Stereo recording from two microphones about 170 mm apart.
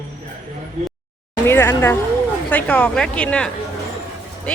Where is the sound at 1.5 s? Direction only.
15° left (ahead or behind).